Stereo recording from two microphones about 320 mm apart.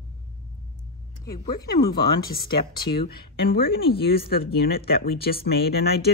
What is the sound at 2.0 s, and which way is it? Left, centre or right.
Speech, left.